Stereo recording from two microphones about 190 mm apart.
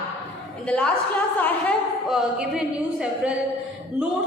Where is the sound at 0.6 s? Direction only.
5° left (ahead or behind).